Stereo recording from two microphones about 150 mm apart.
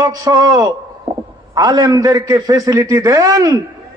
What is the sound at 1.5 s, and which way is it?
A man's voice, 25° right (ahead or behind).